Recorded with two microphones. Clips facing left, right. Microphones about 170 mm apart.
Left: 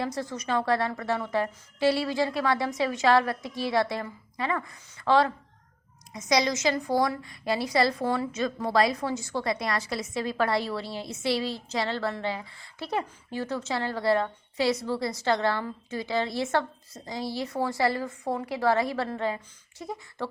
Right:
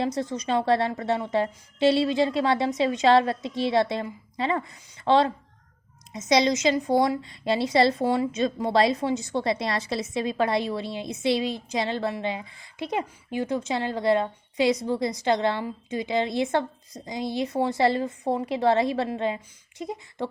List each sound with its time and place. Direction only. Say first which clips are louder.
0.0 s a woman's voice: right 4 dB; 20° right (ahead or behind)